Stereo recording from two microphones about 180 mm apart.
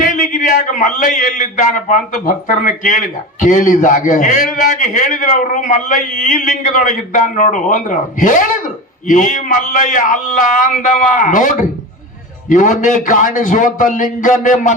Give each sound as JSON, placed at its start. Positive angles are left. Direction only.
{"t": 0.0, "sound": "a man's voice", "side_deg": 45}